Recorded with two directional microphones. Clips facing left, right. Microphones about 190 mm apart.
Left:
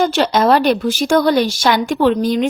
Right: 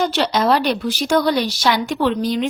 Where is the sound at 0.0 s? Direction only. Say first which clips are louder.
Left 4 dB; 50° left (ahead or behind).